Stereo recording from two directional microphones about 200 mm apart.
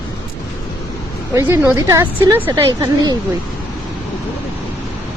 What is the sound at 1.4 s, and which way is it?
Speech, 15° right (ahead or behind).